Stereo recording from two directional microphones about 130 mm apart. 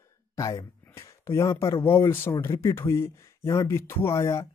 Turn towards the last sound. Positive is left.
turn(degrees=20)  # may be behind; listen again after turning